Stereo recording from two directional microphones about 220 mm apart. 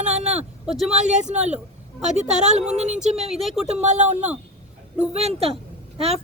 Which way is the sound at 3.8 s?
30° right (ahead or behind).